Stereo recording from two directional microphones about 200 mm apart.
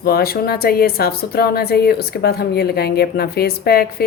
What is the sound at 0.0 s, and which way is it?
A woman's voice, 50° left (ahead or behind).